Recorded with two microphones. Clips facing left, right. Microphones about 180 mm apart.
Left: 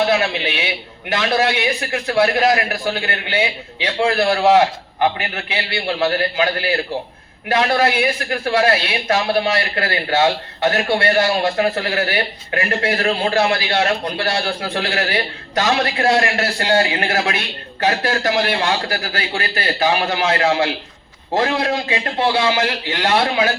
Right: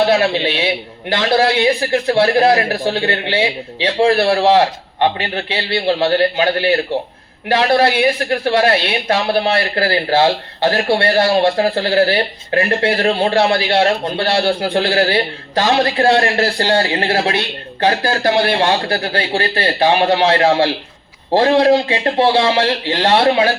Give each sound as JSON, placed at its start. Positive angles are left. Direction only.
{"t": 0.0, "sound": "a man's voice", "side_deg": -30}